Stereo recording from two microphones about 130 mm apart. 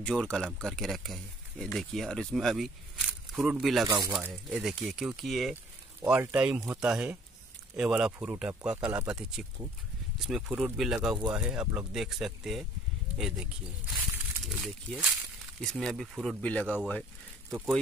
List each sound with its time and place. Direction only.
0.0 s speech: 5° left (ahead or behind)
3.8 s speech: 25° right (ahead or behind)
4.6 s speech: 5° right (ahead or behind)
17.5 s speech: 15° right (ahead or behind)